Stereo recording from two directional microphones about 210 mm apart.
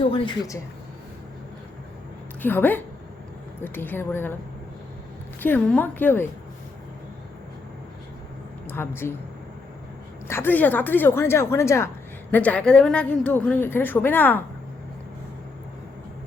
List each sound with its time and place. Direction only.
0.0 s speech: 25° left (ahead or behind)
2.4 s a woman's voice: 10° left (ahead or behind)
5.4 s a woman's voice: 10° left (ahead or behind)
8.6 s a sound: 10° left (ahead or behind)
10.2 s a woman's voice: 10° left (ahead or behind)